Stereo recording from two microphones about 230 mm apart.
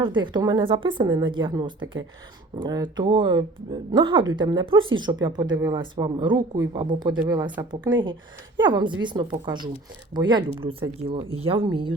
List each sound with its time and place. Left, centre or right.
0.0 s speech: centre